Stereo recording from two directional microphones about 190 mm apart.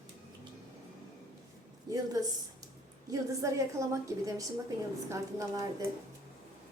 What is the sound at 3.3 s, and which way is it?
A woman's voice, 15° right (ahead or behind).